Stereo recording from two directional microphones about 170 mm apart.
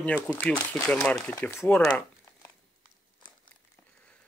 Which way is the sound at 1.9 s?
20° left (ahead or behind).